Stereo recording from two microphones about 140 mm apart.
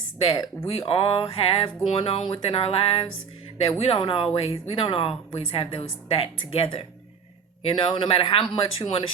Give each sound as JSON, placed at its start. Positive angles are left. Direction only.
{"t": 0.7, "sound": "speech", "side_deg": 40}